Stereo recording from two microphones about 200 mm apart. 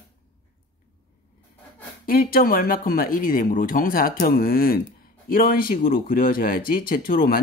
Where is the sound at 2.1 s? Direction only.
45° left (ahead or behind).